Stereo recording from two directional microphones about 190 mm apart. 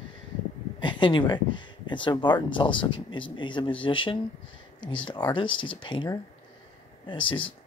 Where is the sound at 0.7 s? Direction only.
25° left (ahead or behind).